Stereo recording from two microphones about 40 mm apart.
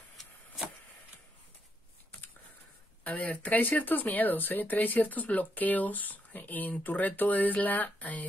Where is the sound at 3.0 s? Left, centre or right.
Left.